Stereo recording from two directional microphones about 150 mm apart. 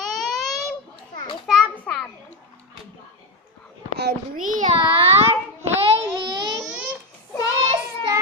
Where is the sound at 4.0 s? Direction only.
60° right (ahead or behind); by 6.4 s 30° right (ahead or behind).